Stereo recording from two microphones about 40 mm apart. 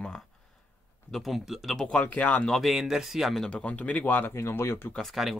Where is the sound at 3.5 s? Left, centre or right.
Left.